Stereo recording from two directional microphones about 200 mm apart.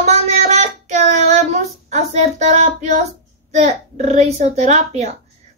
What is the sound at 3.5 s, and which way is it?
Speech, 35° right (ahead or behind).